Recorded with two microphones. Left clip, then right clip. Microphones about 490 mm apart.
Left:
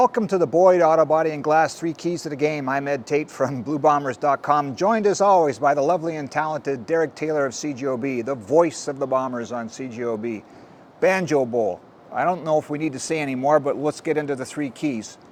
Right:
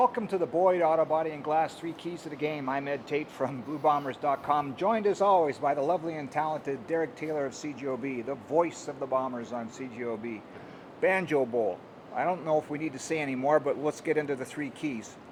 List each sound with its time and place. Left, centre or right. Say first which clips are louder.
0.0 s a man's voice: left 8 dB; left